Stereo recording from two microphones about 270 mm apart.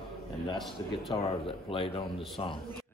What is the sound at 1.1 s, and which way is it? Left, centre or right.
A man's voice, left.